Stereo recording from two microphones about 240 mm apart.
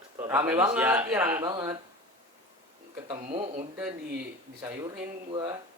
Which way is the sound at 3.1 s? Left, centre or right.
Right.